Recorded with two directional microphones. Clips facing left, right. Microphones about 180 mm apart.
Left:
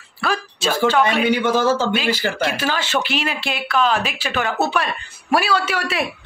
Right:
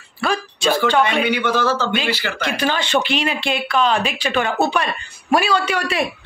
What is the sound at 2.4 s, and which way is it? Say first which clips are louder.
Speech: right 3 dB; 5° left (ahead or behind).